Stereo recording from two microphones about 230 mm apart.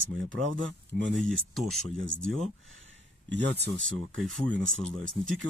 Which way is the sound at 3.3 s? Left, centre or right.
Right.